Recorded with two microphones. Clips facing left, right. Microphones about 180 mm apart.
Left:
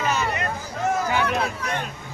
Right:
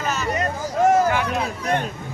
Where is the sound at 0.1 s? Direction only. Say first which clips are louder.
Right 5 dB; 40° right (ahead or behind).